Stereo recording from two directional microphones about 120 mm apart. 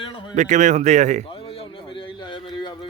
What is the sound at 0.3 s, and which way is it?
Speech, 90° right.